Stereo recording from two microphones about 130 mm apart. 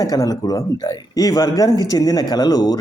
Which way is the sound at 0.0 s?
30° left (ahead or behind).